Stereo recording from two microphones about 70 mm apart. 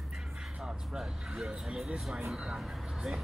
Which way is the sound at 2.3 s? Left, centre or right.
Centre.